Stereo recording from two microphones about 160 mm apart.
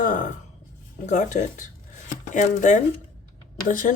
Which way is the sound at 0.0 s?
55° left (ahead or behind).